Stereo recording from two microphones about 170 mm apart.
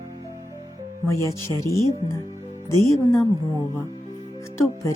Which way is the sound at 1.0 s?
15° left (ahead or behind).